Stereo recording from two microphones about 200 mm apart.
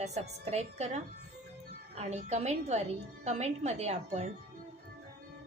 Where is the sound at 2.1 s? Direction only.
35° right (ahead or behind).